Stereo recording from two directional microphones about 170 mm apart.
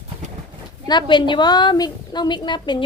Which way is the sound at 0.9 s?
25° left (ahead or behind).